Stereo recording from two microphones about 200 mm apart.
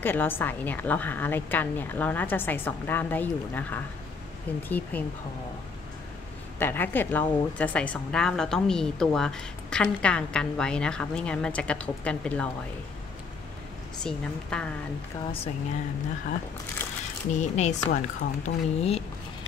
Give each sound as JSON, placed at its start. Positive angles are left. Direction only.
{"t": 0.0, "sound": "a woman's voice", "side_deg": 10}
{"t": 6.6, "sound": "a woman's voice", "side_deg": 10}
{"t": 14.0, "sound": "a woman's voice", "side_deg": 5}
{"t": 16.8, "sound": "a sound", "side_deg": 10}
{"t": 17.3, "sound": "a woman's voice", "side_deg": 35}